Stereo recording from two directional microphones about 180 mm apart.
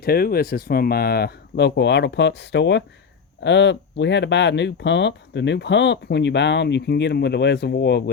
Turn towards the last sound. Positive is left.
turn(degrees=70)  # may be behind; listen again after turning